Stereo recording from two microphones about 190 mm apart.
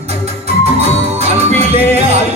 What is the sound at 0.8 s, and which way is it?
Music, 35° right (ahead or behind).